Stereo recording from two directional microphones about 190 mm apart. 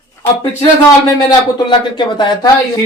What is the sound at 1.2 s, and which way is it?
Speech, 25° left (ahead or behind).